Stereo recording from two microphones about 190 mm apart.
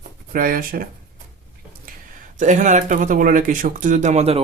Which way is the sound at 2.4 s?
40° right (ahead or behind).